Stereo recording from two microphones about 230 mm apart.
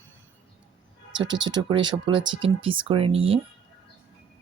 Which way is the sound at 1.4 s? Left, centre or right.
Centre.